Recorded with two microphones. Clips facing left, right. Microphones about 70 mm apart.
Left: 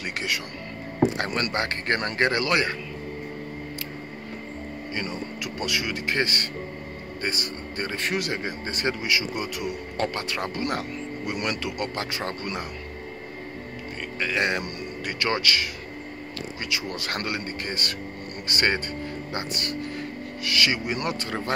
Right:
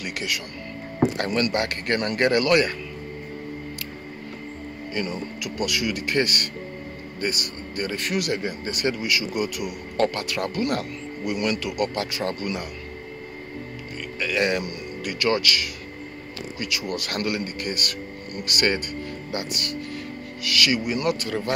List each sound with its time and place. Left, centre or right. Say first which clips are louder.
0.0 s speech: even; left
4.9 s speech: right 3 dB; left
14.1 s a man's voice: right 2 dB; left